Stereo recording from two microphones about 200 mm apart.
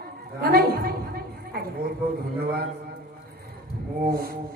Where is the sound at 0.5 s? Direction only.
50° right (ahead or behind).